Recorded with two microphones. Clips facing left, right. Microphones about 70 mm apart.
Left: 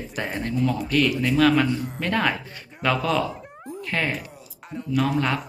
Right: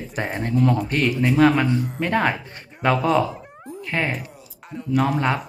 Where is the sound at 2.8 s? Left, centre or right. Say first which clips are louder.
Right 4 dB; right.